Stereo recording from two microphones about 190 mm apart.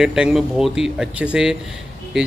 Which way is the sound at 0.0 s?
5° right (ahead or behind).